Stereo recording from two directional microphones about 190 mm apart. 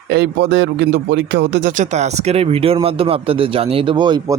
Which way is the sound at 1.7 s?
40° right (ahead or behind).